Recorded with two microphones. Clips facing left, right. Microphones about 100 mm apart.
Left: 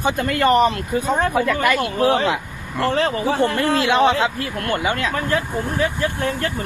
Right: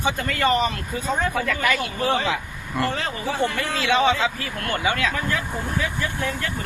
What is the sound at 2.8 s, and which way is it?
Speech, 35° left (ahead or behind).